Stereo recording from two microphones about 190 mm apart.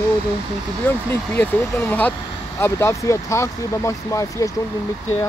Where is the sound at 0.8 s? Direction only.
10° left (ahead or behind).